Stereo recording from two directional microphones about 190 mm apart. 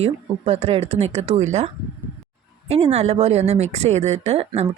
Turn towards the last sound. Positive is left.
turn(degrees=-30)  # may be behind; listen again after turning